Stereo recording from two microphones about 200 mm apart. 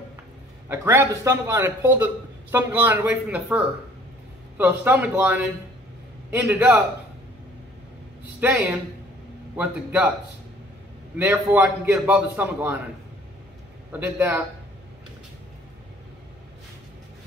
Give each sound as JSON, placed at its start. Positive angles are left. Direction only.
{"t": 0.7, "sound": "a man's voice", "side_deg": -15}
{"t": 8.4, "sound": "a man's voice", "side_deg": -10}
{"t": 11.1, "sound": "a man's voice", "side_deg": -10}
{"t": 13.9, "sound": "a man's voice", "side_deg": -10}